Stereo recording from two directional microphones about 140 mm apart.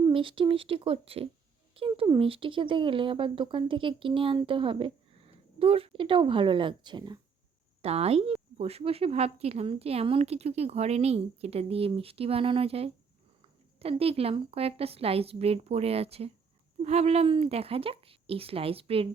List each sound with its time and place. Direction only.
0.0 s speech: 35° right (ahead or behind)
7.8 s a woman's voice: 45° right (ahead or behind)